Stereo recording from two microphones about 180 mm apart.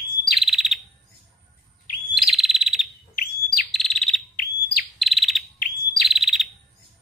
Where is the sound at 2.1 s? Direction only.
Centre (ahead or behind).